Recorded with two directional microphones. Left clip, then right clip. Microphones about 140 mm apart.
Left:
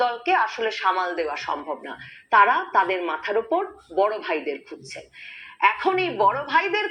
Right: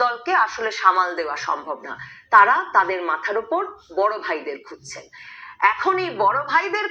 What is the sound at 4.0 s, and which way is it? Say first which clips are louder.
Speech: right 1 dB; 50° right (ahead or behind).